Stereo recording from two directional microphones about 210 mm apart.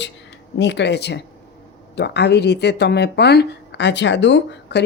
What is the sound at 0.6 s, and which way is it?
Speech, 55° left (ahead or behind).